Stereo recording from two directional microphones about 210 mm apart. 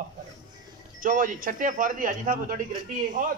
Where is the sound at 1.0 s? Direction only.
40° right (ahead or behind).